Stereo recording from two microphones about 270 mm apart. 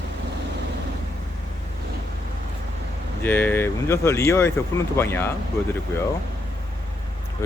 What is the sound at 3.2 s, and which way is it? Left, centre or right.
Speech, centre.